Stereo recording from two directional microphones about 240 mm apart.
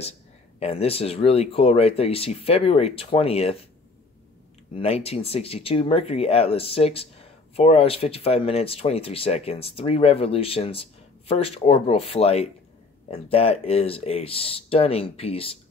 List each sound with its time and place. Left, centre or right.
0.6 s speech: left
4.7 s speech: left